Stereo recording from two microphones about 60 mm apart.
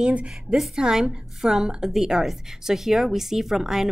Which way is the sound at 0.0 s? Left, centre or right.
Centre.